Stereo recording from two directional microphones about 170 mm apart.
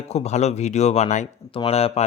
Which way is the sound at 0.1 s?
40° left (ahead or behind).